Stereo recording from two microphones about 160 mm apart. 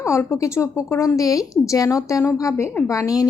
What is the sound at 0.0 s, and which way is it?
A woman's voice, 15° left (ahead or behind).